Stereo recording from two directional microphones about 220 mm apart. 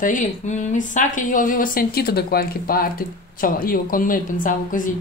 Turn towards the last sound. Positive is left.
turn(degrees=35)  # may be behind; listen again after turning